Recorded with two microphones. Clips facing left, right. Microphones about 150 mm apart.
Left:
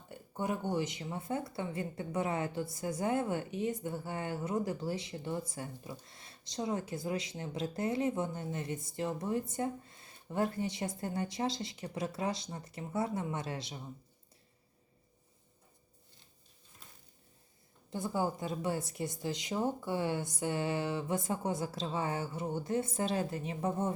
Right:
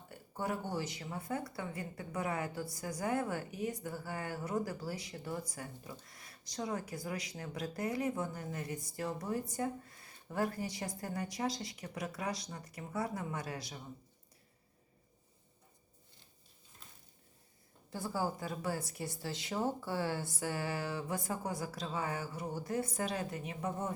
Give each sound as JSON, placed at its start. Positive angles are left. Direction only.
{"t": 0.1, "sound": "speech", "side_deg": 20}
{"t": 17.9, "sound": "speech", "side_deg": 20}